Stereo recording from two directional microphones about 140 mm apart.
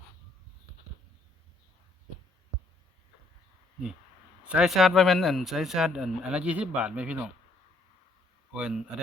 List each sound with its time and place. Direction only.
4.4 s speech: 5° right (ahead or behind)
8.5 s a man's voice: 5° right (ahead or behind)